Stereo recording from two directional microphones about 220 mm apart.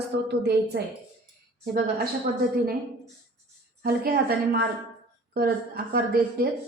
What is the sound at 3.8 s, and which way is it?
Speech, 45° right (ahead or behind).